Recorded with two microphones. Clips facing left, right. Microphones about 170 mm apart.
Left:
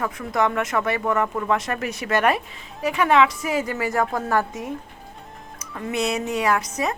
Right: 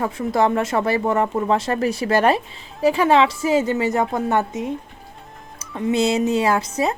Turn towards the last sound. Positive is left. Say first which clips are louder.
# right 3 dB
turn(degrees=-30)  # may be behind; listen again after turning